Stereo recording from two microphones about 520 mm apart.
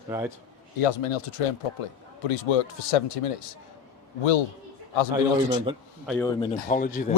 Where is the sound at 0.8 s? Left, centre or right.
Left.